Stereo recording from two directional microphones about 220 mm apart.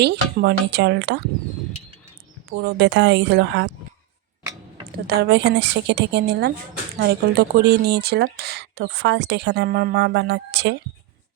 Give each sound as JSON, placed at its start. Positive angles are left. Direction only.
{"t": 0.0, "sound": "speech", "side_deg": -50}
{"t": 2.6, "sound": "speech", "side_deg": -50}
{"t": 4.9, "sound": "speech", "side_deg": -45}